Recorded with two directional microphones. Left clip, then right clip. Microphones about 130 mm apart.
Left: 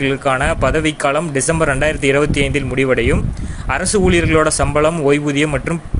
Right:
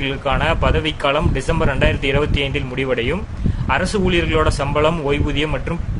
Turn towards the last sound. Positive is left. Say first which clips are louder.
# left 4 dB
turn(degrees=35)  # may be behind; listen again after turning